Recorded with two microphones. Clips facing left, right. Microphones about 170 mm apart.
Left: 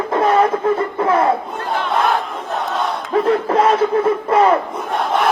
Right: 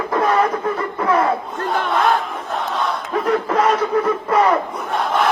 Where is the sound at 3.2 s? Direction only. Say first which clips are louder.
Left 1 dB; 25° left (ahead or behind).